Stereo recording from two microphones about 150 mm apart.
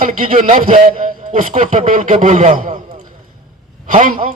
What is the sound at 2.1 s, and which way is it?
Speech, 50° right (ahead or behind).